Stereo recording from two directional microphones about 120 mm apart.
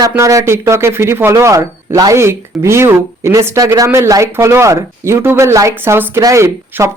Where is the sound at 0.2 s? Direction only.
25° right (ahead or behind).